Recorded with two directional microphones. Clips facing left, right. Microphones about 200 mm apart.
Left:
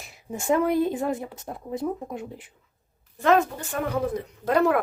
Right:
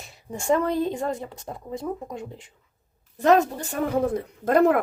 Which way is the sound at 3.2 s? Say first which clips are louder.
Right 2 dB; 40° right (ahead or behind).